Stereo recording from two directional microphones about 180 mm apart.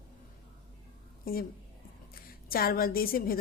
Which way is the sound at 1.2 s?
55° left (ahead or behind).